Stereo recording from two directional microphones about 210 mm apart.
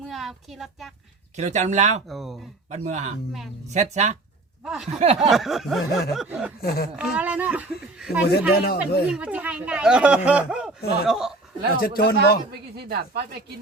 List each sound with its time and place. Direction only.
0.1 s speech: centre (ahead or behind)
1.4 s speech: 35° right (ahead or behind)
2.0 s speech: centre (ahead or behind)
2.6 s speech: 35° right (ahead or behind)
4.6 s speech: centre (ahead or behind)
4.9 s a sound: 30° right (ahead or behind)
5.3 s speech: centre (ahead or behind)
6.6 s speech: 45° left (ahead or behind)
6.9 s a child's voice: 5° right (ahead or behind)
8.2 s speech: 50° left (ahead or behind)
9.0 s speech: 5° right (ahead or behind)
11.8 s speech: 45° left (ahead or behind)
12.5 s speech: 50° right (ahead or behind)